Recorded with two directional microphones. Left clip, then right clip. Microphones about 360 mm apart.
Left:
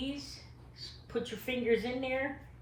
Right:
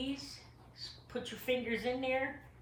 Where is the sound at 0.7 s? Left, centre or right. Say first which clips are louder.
Left 5 dB; centre.